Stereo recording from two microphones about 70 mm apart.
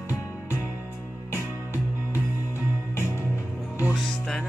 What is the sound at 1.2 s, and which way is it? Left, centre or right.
Music, left.